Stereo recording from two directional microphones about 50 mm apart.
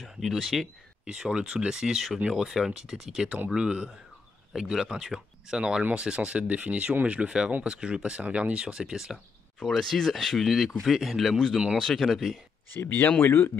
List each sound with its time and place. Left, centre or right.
0.2 s speech: centre
1.0 s speech: centre
9.1 s speech: centre
10.4 s speech: centre
12.7 s speech: left